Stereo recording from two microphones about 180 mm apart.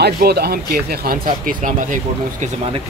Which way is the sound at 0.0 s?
60° right (ahead or behind).